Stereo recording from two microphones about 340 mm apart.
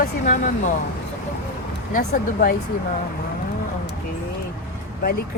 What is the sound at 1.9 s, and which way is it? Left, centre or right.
Speech, left.